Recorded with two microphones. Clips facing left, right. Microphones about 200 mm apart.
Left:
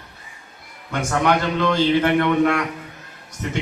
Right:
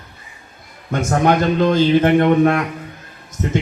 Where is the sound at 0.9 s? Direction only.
45° right (ahead or behind).